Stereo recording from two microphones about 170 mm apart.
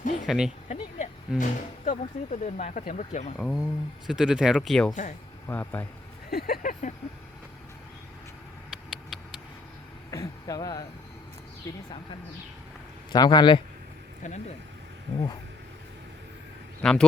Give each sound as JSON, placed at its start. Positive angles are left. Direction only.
{"t": 0.3, "sound": "speech", "side_deg": -5}
{"t": 0.7, "sound": "a sound", "side_deg": 45}
{"t": 1.4, "sound": "speech", "side_deg": 45}
{"t": 3.3, "sound": "speech", "side_deg": 0}
{"t": 5.5, "sound": "speech", "side_deg": 10}
{"t": 6.3, "sound": "speech", "side_deg": 60}
{"t": 10.1, "sound": "a sound", "side_deg": 20}
{"t": 11.7, "sound": "speech", "side_deg": 20}
{"t": 13.1, "sound": "speech", "side_deg": 25}
{"t": 16.8, "sound": "speech", "side_deg": 5}